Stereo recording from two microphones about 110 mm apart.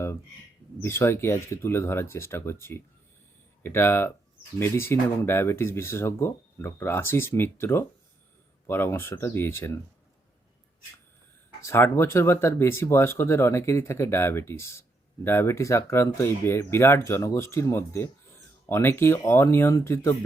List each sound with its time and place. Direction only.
0.8 s speech: 25° left (ahead or behind)
11.6 s speech: 25° left (ahead or behind)